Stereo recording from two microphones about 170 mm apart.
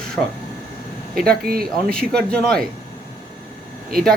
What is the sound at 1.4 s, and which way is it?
Speech, 60° right (ahead or behind).